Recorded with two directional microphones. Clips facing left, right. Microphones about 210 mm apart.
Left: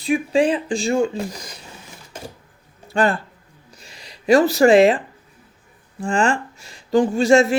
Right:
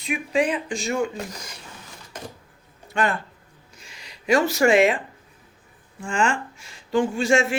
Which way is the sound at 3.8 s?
35° left (ahead or behind).